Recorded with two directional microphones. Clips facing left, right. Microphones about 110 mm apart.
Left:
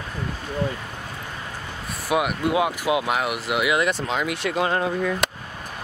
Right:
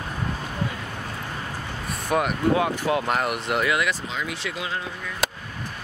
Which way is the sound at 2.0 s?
5° left (ahead or behind).